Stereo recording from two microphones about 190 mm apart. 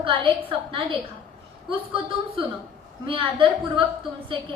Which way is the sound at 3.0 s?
25° right (ahead or behind).